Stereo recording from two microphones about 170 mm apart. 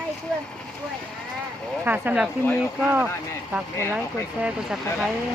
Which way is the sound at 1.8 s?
10° right (ahead or behind).